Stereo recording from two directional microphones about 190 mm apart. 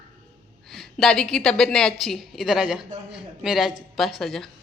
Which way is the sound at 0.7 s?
Centre (ahead or behind).